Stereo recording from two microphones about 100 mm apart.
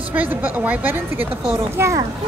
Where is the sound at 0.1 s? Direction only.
15° right (ahead or behind).